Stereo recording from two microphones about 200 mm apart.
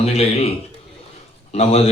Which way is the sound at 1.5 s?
30° left (ahead or behind).